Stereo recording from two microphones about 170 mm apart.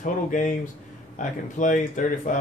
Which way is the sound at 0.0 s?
50° left (ahead or behind).